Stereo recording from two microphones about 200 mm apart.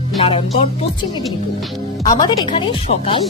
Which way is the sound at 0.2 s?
25° left (ahead or behind).